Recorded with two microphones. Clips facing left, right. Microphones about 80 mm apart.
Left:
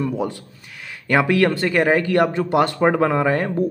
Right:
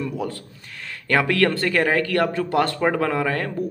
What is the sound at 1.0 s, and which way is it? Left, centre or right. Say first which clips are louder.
Speech: left 2 dB; centre.